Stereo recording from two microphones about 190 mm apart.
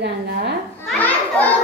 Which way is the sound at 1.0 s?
10° left (ahead or behind).